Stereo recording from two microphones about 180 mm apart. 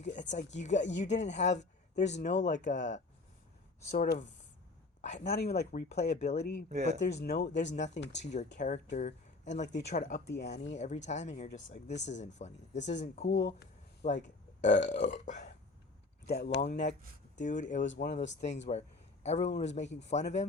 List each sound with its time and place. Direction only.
0.0 s a sound: 45° left (ahead or behind)
0.6 s speech: 40° left (ahead or behind)
3.9 s speech: 55° left (ahead or behind)
4.9 s a sound: 40° left (ahead or behind)
5.2 s speech: 60° left (ahead or behind)
7.5 s speech: 40° left (ahead or behind)
7.9 s speech: 70° left (ahead or behind)
8.2 s speech: 40° left (ahead or behind)
10.5 s speech: 75° left (ahead or behind)
10.8 s speech: 40° left (ahead or behind)
13.2 s speech: 70° left (ahead or behind)
14.1 s a man's voice: 45° left (ahead or behind)
16.2 s speech: 60° left (ahead or behind)
16.6 s speech: 40° left (ahead or behind)